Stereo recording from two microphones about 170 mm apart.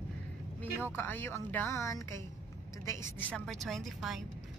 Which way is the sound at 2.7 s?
20° left (ahead or behind).